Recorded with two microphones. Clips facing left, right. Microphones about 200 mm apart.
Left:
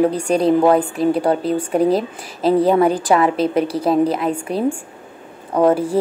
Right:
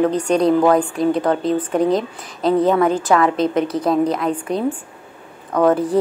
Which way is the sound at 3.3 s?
10° left (ahead or behind).